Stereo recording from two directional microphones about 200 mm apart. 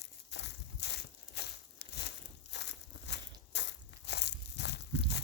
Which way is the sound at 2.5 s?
60° left (ahead or behind).